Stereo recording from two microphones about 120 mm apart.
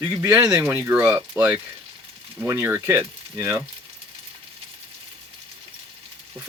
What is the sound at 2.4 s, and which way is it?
Speech, 20° right (ahead or behind).